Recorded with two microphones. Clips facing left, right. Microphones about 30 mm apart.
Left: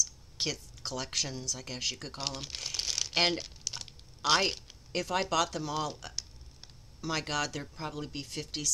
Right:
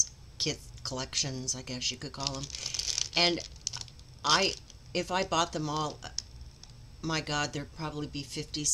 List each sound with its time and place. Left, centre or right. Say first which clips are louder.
0.0 s speech: even; centre
2.3 s speech: even; centre
2.6 s crumpling: left 1 dB; centre
5.3 s speech: right 1 dB; centre